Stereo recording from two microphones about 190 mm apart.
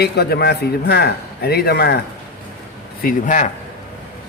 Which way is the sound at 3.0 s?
45° left (ahead or behind).